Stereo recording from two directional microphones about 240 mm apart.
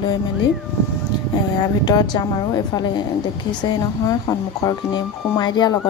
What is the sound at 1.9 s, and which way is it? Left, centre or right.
Speech, centre.